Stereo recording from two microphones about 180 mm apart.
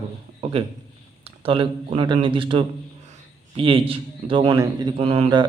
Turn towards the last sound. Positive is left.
turn(degrees=-30)  # may be behind; listen again after turning